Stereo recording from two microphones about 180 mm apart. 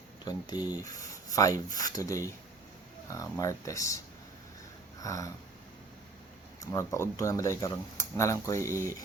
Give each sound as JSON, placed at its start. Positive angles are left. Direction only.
{"t": 0.3, "sound": "speech", "side_deg": 20}
{"t": 4.9, "sound": "a sound", "side_deg": 20}
{"t": 6.7, "sound": "speech", "side_deg": 15}